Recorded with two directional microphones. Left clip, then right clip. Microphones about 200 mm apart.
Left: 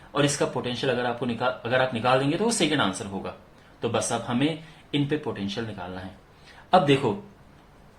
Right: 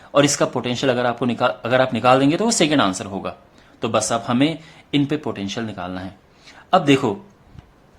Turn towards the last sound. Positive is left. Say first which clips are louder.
# right 4 dB
turn(degrees=-50)  # may be behind; listen again after turning